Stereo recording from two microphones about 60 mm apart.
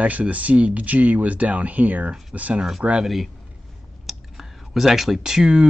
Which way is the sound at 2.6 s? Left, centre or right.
Centre.